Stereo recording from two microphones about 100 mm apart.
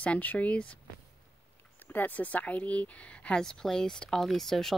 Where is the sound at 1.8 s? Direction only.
20° left (ahead or behind).